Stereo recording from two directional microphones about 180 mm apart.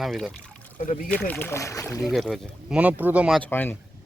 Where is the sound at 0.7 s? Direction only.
45° left (ahead or behind).